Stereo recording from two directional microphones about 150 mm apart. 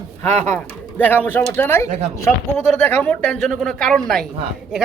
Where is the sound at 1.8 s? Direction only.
55° right (ahead or behind).